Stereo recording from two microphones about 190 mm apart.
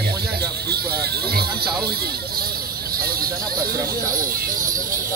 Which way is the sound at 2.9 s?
50° right (ahead or behind).